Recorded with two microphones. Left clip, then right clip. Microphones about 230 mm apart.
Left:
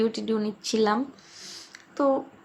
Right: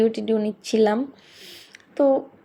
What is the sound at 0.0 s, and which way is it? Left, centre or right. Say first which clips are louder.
Speech: right 5 dB; centre.